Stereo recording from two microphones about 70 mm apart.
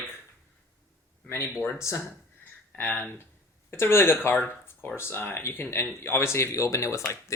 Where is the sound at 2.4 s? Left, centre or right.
Left.